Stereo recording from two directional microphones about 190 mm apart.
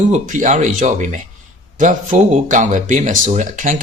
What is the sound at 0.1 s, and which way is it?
Speech, 40° right (ahead or behind).